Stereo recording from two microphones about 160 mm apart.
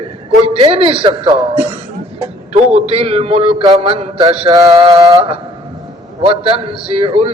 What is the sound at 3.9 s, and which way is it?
Speech, 35° right (ahead or behind).